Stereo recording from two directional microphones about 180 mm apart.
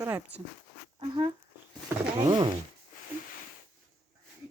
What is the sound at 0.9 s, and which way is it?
Speech, 25° right (ahead or behind).